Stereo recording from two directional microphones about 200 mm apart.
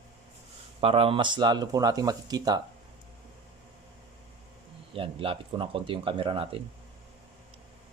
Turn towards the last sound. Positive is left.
turn(degrees=-25)  # may be behind; listen again after turning